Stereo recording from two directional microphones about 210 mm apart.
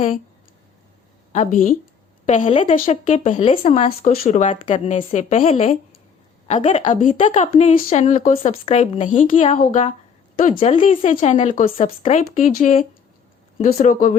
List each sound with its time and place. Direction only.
1.3 s a woman's voice: 35° left (ahead or behind)